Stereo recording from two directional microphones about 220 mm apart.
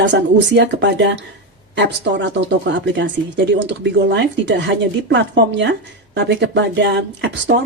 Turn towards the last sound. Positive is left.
turn(degrees=-50)  # may be behind; listen again after turning